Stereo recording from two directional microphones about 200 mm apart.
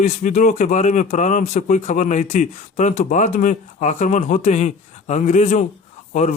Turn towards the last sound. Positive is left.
turn(degrees=35)  # may be behind; listen again after turning